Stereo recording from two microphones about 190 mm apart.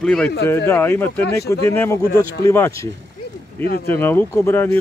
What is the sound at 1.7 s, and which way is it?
Speech, 15° left (ahead or behind).